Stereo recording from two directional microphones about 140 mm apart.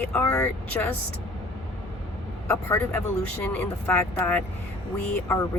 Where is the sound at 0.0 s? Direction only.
10° left (ahead or behind).